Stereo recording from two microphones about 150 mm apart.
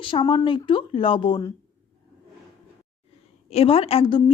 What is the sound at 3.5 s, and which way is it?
Speech, 40° left (ahead or behind).